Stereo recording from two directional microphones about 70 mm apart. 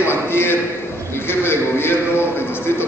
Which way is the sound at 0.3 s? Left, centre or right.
Left.